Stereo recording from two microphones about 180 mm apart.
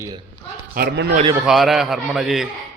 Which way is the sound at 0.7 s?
65° right (ahead or behind).